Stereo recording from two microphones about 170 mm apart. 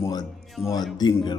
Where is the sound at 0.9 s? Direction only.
25° left (ahead or behind).